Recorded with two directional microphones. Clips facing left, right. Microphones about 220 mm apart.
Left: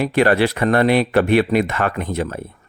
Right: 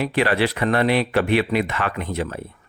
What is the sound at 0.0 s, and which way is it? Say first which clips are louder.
Speech: left 4 dB; 45° left (ahead or behind).